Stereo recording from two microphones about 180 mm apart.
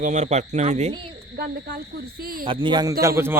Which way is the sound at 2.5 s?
25° right (ahead or behind).